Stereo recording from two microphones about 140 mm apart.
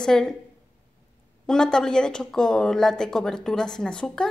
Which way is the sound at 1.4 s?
5° left (ahead or behind).